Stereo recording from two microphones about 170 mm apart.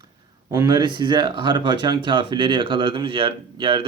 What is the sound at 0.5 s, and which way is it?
Speech, 25° right (ahead or behind).